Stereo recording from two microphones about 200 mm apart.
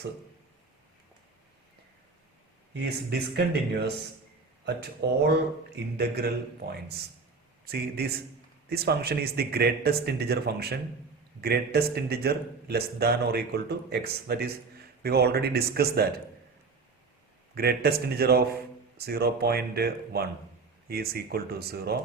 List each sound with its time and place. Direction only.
2.7 s a man's voice: 55° right (ahead or behind)
17.5 s a man's voice: 50° right (ahead or behind)